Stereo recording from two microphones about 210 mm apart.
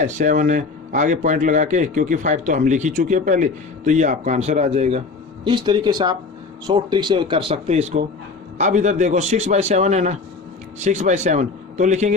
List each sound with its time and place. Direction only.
0.0 s a man's voice: 35° right (ahead or behind)